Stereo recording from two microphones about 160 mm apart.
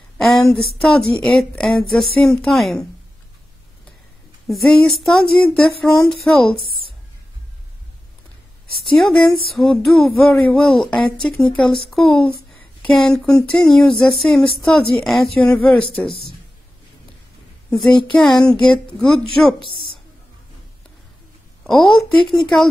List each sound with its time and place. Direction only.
0.2 s speech: centre (ahead or behind)
4.5 s speech: centre (ahead or behind)
8.9 s speech: 5° left (ahead or behind)
17.6 s speech: 5° left (ahead or behind)
21.6 s speech: centre (ahead or behind)